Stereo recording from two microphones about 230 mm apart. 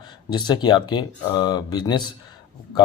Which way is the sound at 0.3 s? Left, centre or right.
Centre.